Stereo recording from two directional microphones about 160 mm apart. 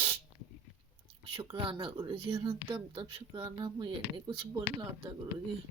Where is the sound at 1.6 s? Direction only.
30° right (ahead or behind).